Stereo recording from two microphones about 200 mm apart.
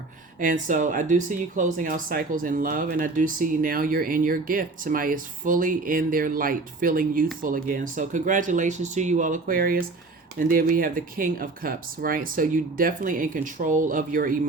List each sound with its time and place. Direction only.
0.3 s speech: 40° right (ahead or behind)